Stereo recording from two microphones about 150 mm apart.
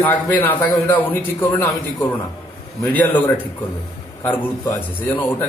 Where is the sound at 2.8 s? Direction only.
10° left (ahead or behind).